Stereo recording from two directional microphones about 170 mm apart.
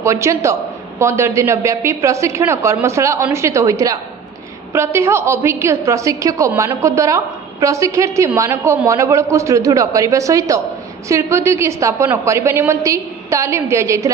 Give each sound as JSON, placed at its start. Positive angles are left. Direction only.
{"t": 0.0, "sound": "a man's voice", "side_deg": -15}